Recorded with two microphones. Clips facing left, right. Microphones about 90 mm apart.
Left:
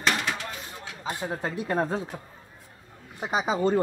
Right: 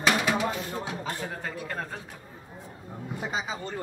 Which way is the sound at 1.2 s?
30° left (ahead or behind).